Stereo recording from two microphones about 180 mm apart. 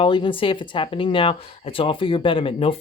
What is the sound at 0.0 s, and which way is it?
Speech, 30° left (ahead or behind).